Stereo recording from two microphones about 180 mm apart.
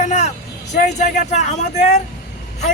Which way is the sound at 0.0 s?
40° left (ahead or behind).